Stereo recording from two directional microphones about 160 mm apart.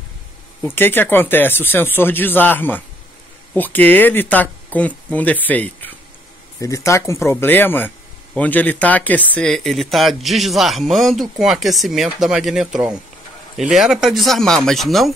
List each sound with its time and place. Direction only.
0.6 s speech: 15° left (ahead or behind)